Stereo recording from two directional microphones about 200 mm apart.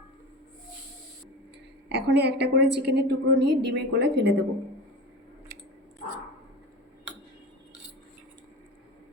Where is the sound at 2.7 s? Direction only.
55° right (ahead or behind).